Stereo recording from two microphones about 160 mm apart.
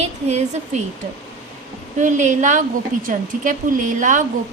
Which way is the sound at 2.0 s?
50° right (ahead or behind).